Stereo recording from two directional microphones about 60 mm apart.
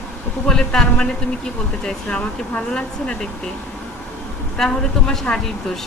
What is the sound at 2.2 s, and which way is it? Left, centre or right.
Speech, centre.